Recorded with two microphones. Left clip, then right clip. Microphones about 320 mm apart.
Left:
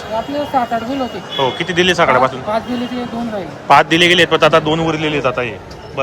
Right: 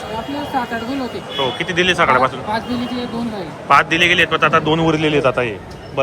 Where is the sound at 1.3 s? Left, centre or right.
Centre.